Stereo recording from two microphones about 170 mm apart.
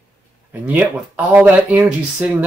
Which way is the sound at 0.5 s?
10° right (ahead or behind).